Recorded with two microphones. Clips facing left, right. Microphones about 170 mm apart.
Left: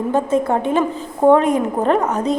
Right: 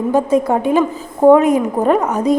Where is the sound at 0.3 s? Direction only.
10° right (ahead or behind).